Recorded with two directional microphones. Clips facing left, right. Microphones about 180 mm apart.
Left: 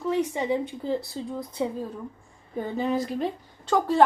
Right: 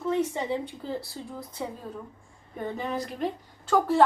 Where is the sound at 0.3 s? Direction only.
15° left (ahead or behind).